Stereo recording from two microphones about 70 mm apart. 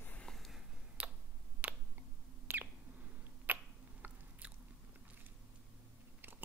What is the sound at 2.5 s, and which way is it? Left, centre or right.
Bird, right.